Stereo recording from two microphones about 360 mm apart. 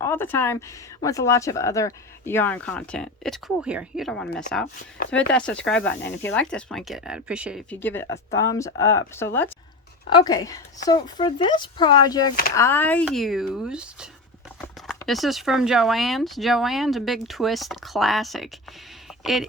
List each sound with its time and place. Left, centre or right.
0.0 s a woman's voice: centre